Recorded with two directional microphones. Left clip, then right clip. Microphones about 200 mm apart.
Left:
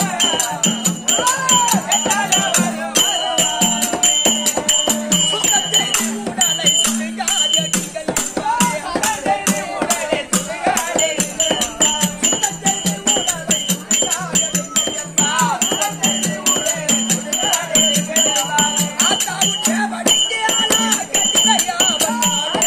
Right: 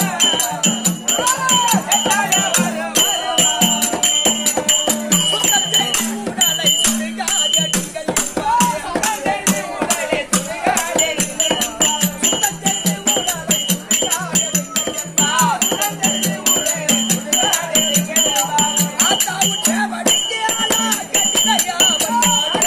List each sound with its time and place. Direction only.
1.2 s music: centre (ahead or behind)
7.3 s music: centre (ahead or behind)